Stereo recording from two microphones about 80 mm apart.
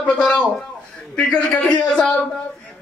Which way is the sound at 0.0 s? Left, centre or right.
Centre.